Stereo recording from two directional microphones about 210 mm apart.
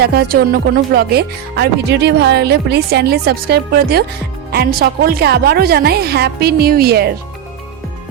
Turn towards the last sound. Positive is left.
turn(degrees=-50)  # may be behind; listen again after turning